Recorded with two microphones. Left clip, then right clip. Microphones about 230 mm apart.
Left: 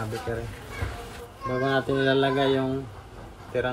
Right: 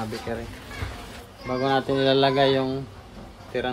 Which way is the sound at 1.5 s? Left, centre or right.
Right.